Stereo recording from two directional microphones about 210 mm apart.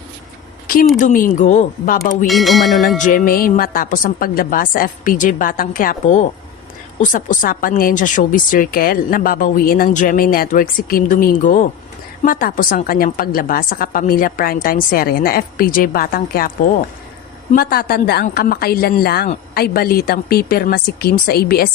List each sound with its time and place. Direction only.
0.9 s speech: 40° left (ahead or behind)
2.2 s a sound: centre (ahead or behind)
3.0 s a woman's voice: 40° left (ahead or behind)
17.5 s a woman's voice: 45° left (ahead or behind)